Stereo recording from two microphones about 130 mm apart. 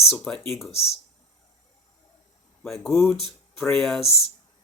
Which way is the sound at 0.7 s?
50° left (ahead or behind).